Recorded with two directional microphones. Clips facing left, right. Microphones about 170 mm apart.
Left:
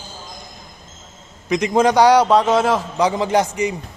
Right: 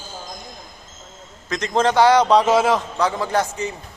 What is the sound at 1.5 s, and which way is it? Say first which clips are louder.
Speech: left 4 dB; 10° left (ahead or behind).